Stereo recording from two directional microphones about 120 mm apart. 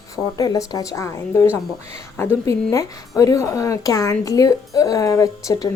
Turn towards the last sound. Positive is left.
turn(degrees=30)  # may be behind; listen again after turning